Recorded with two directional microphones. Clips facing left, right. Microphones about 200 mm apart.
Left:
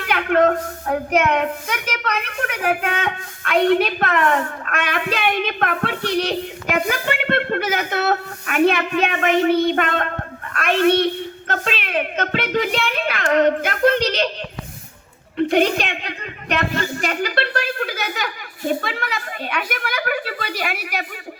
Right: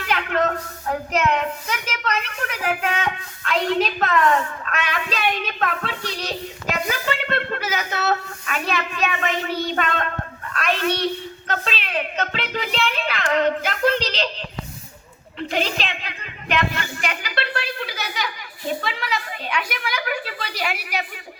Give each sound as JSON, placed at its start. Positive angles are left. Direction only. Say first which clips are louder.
{"t": 0.0, "sound": "a woman's voice", "louder": "left 5 dB", "side_deg": 55}
{"t": 15.4, "sound": "a woman's voice", "louder": "left 8 dB", "side_deg": 55}
{"t": 16.6, "sound": "a woman's voice", "louder": "left 3 dB", "side_deg": 40}